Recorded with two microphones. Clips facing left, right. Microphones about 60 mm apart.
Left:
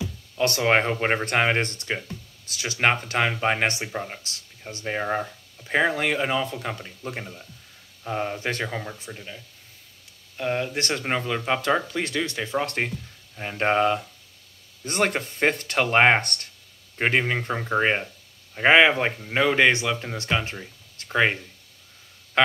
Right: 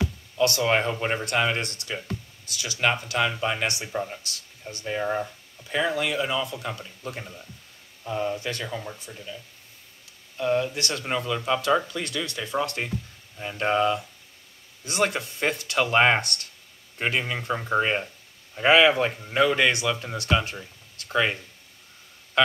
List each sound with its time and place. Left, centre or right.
0.4 s speech: left
12.6 s speech: left